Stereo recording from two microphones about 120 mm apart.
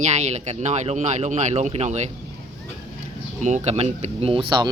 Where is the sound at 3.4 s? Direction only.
70° right (ahead or behind); by 4.7 s 40° right (ahead or behind).